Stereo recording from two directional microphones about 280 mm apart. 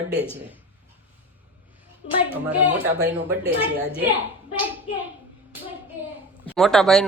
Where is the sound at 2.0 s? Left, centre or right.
Left.